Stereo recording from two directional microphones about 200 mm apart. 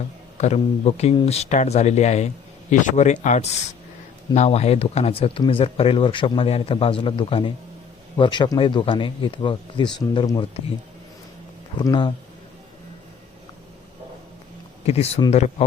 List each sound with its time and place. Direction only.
0.3 s speech: 35° left (ahead or behind)
11.8 s speech: 20° left (ahead or behind)
14.8 s speech: 30° left (ahead or behind)